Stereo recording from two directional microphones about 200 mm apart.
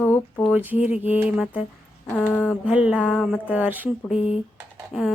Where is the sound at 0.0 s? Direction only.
10° left (ahead or behind).